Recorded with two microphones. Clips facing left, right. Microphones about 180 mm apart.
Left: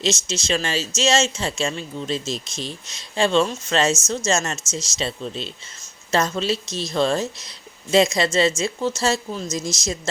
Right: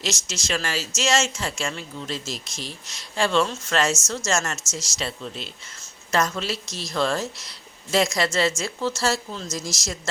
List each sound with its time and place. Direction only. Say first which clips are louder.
0.0 s speech: left 6 dB; 20° left (ahead or behind)